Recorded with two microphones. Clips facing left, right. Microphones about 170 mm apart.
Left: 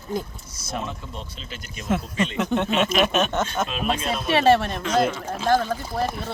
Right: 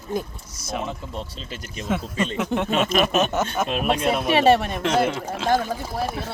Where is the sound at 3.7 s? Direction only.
60° right (ahead or behind).